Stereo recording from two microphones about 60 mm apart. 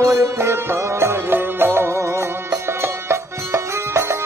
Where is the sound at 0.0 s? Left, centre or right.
Right.